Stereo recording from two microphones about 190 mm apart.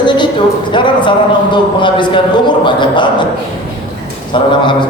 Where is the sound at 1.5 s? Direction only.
25° left (ahead or behind).